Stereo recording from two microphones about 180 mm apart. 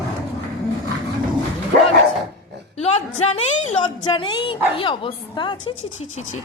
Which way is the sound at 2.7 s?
35° left (ahead or behind).